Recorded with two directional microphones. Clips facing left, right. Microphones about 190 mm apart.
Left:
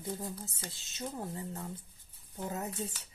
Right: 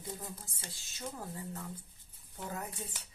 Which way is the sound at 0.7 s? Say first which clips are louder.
Left 3 dB; 20° left (ahead or behind).